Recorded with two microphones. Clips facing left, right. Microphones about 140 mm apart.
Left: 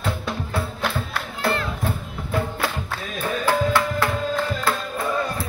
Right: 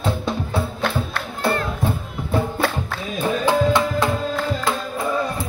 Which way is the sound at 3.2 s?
20° right (ahead or behind).